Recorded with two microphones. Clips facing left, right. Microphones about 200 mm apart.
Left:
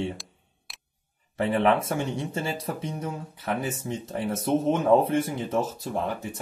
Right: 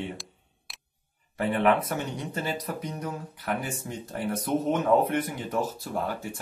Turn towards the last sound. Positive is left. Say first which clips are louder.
# left 2 dB
turn(degrees=20)  # may be behind; listen again after turning